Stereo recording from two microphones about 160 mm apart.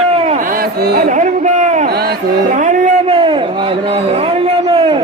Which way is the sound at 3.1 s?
30° right (ahead or behind).